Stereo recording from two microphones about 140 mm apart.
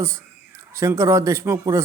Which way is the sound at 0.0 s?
20° right (ahead or behind).